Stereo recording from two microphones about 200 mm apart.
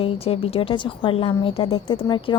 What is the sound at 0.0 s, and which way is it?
A woman's voice, 30° left (ahead or behind).